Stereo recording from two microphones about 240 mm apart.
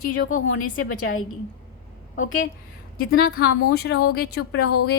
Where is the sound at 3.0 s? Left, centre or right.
Left.